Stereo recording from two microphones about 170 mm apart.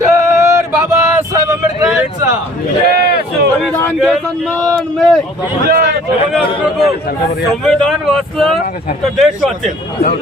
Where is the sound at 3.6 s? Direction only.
10° left (ahead or behind).